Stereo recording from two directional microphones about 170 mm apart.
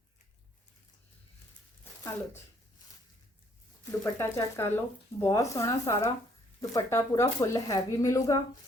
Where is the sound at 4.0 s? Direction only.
15° left (ahead or behind).